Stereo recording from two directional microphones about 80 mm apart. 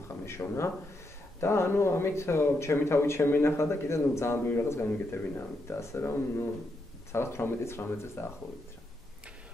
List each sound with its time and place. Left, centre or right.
0.2 s speech: left